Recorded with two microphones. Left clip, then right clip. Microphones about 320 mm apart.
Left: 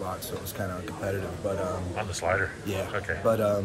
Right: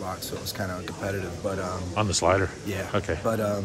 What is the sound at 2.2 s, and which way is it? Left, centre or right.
Speech, right.